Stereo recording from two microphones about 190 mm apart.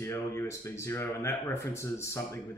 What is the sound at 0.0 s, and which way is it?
Speech, 15° left (ahead or behind).